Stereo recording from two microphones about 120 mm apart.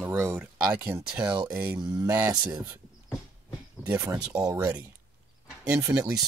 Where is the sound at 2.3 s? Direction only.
30° right (ahead or behind).